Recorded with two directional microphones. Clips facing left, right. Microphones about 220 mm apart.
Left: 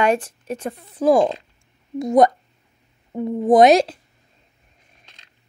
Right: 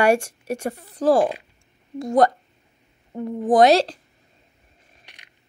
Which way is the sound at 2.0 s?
20° left (ahead or behind).